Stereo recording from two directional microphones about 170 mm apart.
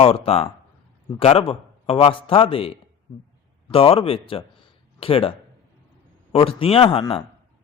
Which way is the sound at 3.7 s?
35° left (ahead or behind).